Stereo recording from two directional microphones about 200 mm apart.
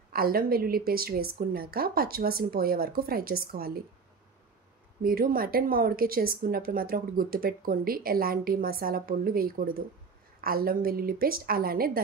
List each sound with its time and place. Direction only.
0.1 s speech: 45° right (ahead or behind)
5.0 s speech: 45° right (ahead or behind)